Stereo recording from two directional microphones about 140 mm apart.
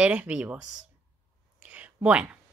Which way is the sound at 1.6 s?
10° right (ahead or behind).